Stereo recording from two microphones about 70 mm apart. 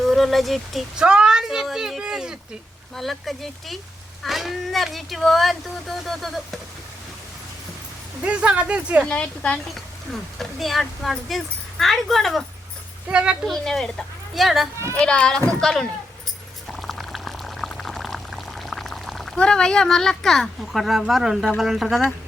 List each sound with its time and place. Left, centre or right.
0.0 s speech: centre
0.9 s speech: centre
1.6 s a sound: centre
2.9 s speech: centre
8.2 s speech: centre
9.0 s speech: centre
9.7 s speech: centre
13.1 s speech: centre
13.5 s speech: centre
14.9 s speech: centre
16.6 s pour: centre
19.4 s speech: centre